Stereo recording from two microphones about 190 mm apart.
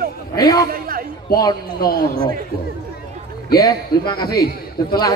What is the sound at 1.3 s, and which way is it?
Speech, 55° left (ahead or behind).